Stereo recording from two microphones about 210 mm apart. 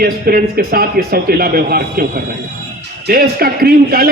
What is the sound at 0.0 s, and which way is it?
A man's voice, 45° right (ahead or behind).